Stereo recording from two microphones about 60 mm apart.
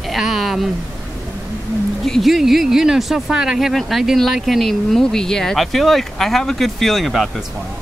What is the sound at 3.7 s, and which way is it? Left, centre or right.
Speech, centre.